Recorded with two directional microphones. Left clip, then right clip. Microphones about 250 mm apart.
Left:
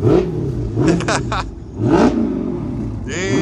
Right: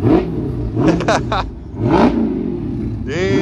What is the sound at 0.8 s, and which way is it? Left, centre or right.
Vehicle, centre.